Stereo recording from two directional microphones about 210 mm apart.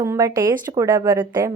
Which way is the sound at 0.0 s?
15° right (ahead or behind).